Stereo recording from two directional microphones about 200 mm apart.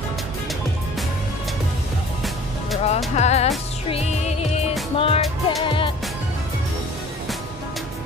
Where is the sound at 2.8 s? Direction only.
35° left (ahead or behind).